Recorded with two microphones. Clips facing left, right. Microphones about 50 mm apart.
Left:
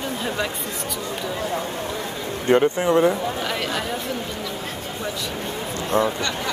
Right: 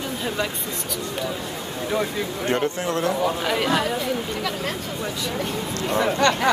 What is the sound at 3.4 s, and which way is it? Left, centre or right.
Speech, centre.